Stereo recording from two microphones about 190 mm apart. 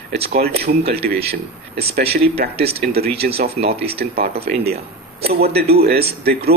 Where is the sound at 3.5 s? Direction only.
30° right (ahead or behind).